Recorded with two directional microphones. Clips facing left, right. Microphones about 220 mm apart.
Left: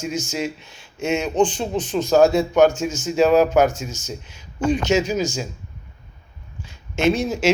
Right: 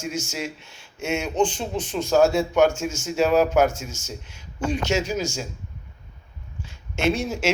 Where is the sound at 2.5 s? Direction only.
35° left (ahead or behind).